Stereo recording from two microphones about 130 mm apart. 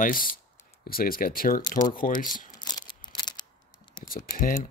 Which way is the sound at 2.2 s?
90° left.